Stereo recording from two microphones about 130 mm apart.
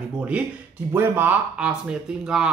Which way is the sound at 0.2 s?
10° right (ahead or behind).